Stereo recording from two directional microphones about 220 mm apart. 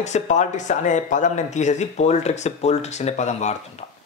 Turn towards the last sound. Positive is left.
turn(degrees=30)  # may be behind; listen again after turning